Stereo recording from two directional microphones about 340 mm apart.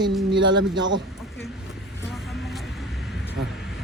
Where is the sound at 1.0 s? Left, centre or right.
Centre.